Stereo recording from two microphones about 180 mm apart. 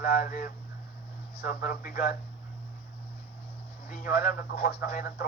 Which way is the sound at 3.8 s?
55° left (ahead or behind).